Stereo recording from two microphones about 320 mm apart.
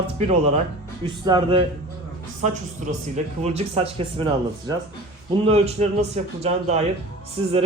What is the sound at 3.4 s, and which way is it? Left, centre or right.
Speech, centre.